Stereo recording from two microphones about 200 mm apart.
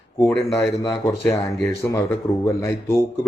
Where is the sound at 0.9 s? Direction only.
15° left (ahead or behind).